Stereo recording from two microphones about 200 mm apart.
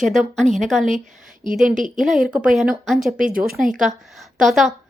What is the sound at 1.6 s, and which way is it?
Speech, 40° right (ahead or behind).